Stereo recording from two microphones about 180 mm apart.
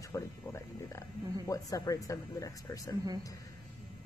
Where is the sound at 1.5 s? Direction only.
20° left (ahead or behind).